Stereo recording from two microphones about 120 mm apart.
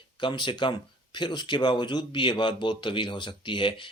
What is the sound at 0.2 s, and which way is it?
Speech, 40° left (ahead or behind).